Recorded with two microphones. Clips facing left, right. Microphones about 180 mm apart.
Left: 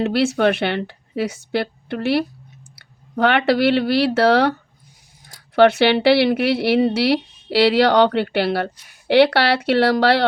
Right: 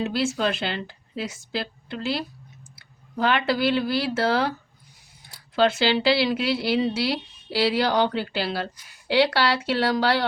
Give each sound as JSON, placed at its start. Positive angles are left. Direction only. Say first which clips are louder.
{"t": 0.0, "sound": "a woman's voice", "louder": "left 7 dB", "side_deg": 70}
{"t": 5.5, "sound": "a woman's voice", "louder": "left 7 dB", "side_deg": 70}